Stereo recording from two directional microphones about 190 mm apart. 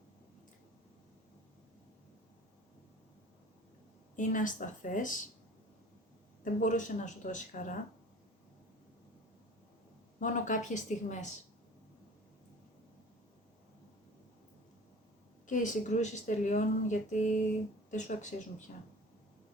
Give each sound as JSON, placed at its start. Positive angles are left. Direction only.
{"t": 4.2, "sound": "speech", "side_deg": 45}
{"t": 6.4, "sound": "speech", "side_deg": 40}
{"t": 10.2, "sound": "speech", "side_deg": 40}
{"t": 15.4, "sound": "speech", "side_deg": 40}